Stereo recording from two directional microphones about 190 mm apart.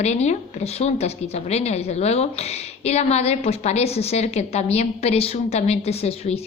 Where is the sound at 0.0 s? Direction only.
35° left (ahead or behind).